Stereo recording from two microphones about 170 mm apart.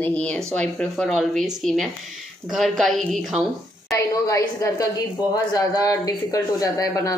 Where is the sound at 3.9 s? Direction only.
20° left (ahead or behind).